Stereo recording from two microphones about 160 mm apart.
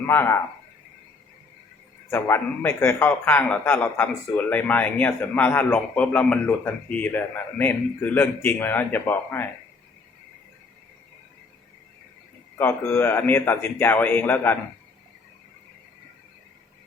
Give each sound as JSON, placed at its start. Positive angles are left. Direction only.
{"t": 0.1, "sound": "a man's voice", "side_deg": 15}
{"t": 2.0, "sound": "a man's voice", "side_deg": 15}
{"t": 12.5, "sound": "a man's voice", "side_deg": 15}